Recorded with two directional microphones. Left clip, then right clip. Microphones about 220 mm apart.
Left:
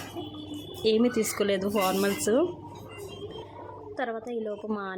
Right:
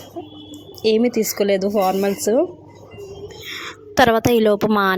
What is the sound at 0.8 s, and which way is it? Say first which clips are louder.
A woman's voice: right 7 dB; 25° right (ahead or behind).